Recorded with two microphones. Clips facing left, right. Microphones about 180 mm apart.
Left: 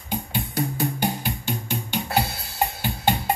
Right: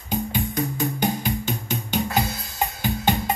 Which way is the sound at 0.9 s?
10° left (ahead or behind).